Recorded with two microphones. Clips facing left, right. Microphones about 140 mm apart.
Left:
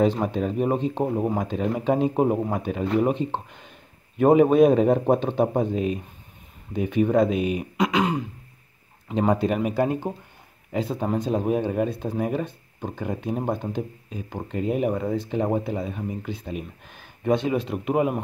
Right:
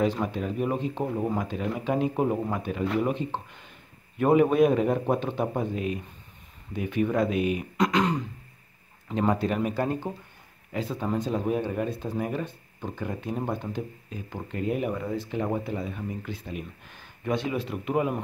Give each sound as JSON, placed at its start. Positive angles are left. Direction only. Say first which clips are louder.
{"t": 0.3, "sound": "speech", "louder": "left 5 dB", "side_deg": 25}
{"t": 7.7, "sound": "throat clearing", "louder": "left 2 dB", "side_deg": 5}
{"t": 9.4, "sound": "speech", "louder": "left 4 dB", "side_deg": 15}
{"t": 14.9, "sound": "speech", "louder": "left 5 dB", "side_deg": 35}